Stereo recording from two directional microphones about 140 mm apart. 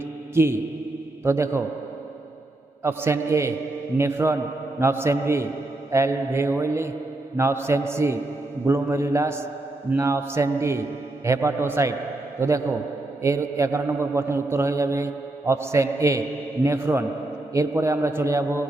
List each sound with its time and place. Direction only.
0.3 s a man's voice: 15° right (ahead or behind)
2.8 s a man's voice: 20° right (ahead or behind)